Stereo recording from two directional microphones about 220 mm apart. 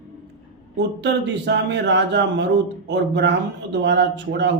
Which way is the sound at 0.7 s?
50° right (ahead or behind).